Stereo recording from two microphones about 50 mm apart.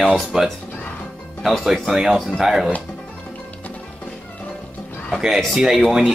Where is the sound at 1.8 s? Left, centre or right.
Centre.